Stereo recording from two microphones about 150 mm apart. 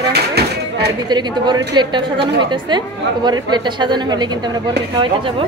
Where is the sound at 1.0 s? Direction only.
30° right (ahead or behind).